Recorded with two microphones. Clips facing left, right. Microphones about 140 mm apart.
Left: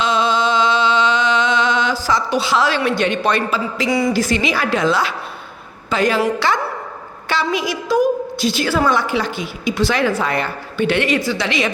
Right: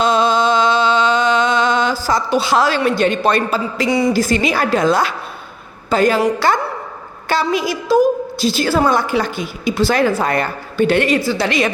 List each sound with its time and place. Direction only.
0.0 s music: 45° right (ahead or behind)
3.8 s speech: 25° right (ahead or behind)
4.1 s a woman's voice: 40° right (ahead or behind)
7.9 s a woman's voice: 30° right (ahead or behind)